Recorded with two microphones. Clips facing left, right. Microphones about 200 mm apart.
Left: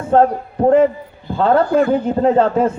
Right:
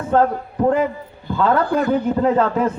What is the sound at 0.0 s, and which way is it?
A man's voice, 30° left (ahead or behind).